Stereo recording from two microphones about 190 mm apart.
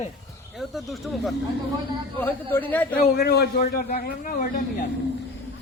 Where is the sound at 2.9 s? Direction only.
55° left (ahead or behind).